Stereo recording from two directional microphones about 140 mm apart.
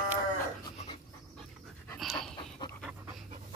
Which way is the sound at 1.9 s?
Centre (ahead or behind).